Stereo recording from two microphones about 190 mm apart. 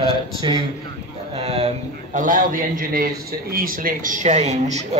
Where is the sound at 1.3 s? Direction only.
30° right (ahead or behind).